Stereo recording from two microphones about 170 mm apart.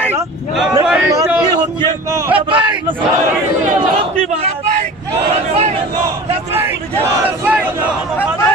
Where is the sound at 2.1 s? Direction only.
10° right (ahead or behind).